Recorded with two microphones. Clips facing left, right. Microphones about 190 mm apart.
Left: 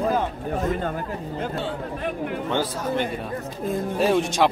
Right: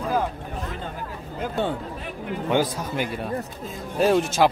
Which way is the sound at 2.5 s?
10° right (ahead or behind).